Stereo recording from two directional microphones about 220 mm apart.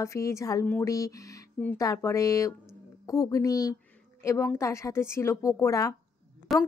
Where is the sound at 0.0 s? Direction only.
15° left (ahead or behind).